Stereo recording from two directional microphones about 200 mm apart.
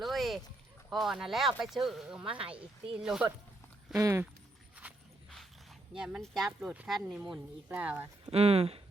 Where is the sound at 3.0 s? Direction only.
5° right (ahead or behind).